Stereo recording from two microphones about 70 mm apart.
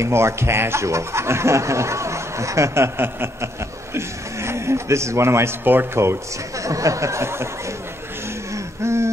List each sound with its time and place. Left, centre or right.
0.0 s speech: right
6.6 s speech: right
8.8 s a sound: right